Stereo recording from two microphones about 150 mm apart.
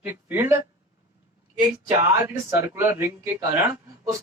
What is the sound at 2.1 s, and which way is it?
Speech, 15° right (ahead or behind).